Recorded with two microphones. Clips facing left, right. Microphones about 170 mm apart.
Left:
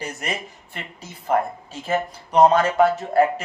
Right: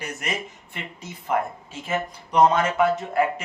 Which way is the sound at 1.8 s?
35° left (ahead or behind).